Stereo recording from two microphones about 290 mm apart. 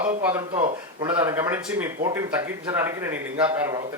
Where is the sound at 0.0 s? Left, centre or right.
Centre.